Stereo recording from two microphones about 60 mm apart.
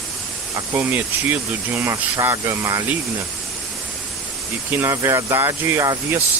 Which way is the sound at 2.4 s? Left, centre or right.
Right.